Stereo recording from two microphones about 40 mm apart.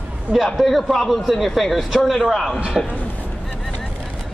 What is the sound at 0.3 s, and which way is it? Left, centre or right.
Speech, right.